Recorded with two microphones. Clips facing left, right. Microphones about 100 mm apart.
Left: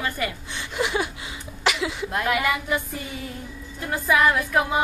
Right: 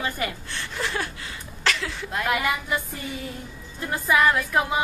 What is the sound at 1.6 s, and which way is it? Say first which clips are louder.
Speech: left 3 dB; 15° left (ahead or behind).